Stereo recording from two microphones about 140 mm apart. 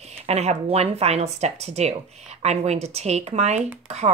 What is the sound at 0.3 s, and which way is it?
Speech, 50° right (ahead or behind).